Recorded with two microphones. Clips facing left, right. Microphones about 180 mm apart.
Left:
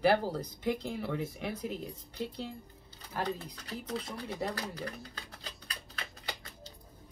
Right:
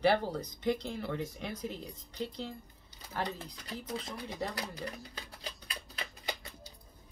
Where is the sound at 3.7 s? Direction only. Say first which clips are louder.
Left 1 dB; 20° right (ahead or behind).